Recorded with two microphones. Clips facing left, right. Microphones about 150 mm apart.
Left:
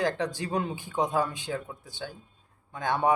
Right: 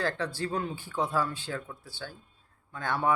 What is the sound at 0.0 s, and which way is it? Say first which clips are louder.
Speech: left 3 dB; 15° left (ahead or behind).